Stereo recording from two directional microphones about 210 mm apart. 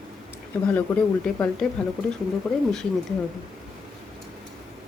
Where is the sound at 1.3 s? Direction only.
10° left (ahead or behind).